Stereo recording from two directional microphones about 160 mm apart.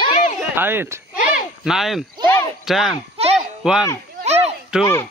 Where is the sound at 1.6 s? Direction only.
Centre (ahead or behind).